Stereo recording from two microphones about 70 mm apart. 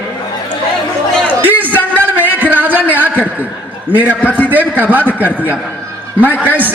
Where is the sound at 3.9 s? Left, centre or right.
Right.